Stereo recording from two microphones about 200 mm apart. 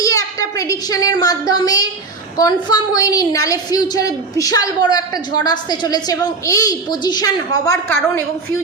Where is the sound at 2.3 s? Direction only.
20° left (ahead or behind).